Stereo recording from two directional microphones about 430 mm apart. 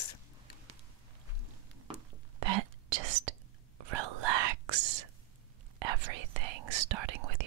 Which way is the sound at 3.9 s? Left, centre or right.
Right.